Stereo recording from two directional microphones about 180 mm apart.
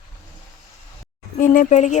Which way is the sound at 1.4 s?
45° left (ahead or behind).